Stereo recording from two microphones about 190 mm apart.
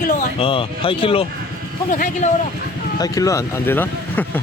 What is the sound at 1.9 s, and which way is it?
Speech, 40° left (ahead or behind).